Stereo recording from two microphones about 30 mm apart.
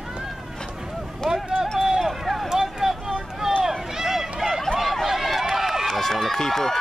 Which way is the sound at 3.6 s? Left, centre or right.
Centre.